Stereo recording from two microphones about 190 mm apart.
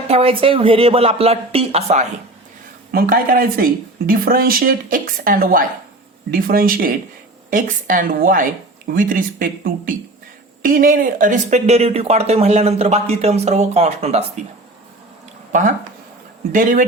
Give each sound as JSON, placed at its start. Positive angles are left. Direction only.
{"t": 0.1, "sound": "speech", "side_deg": -30}
{"t": 2.9, "sound": "speech", "side_deg": -50}
{"t": 16.5, "sound": "speech", "side_deg": -45}